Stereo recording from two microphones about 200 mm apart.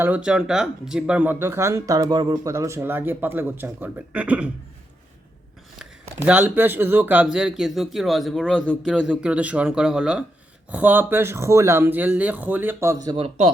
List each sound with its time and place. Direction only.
0.0 s speech: 5° right (ahead or behind)
6.1 s speech: 10° right (ahead or behind)
13.1 s speech: 25° right (ahead or behind)